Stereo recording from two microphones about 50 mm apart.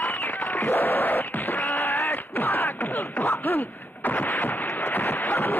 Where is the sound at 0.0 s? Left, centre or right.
Left.